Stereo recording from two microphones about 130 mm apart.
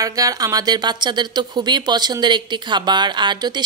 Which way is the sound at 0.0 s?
25° right (ahead or behind).